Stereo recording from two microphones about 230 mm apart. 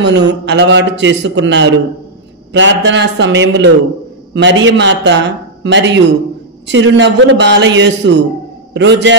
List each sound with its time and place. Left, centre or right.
0.3 s speech: right